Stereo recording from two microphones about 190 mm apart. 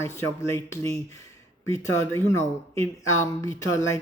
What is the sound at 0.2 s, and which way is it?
Speech, 15° left (ahead or behind).